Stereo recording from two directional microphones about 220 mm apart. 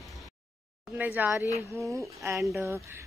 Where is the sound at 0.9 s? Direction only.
5° right (ahead or behind).